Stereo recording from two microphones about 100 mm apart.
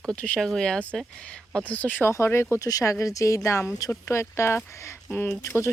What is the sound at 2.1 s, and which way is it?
Speech, 30° left (ahead or behind).